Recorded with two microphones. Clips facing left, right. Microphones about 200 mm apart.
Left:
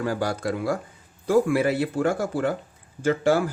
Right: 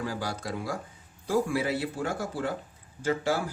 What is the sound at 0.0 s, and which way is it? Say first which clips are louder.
Speech: left 7 dB; 55° left (ahead or behind).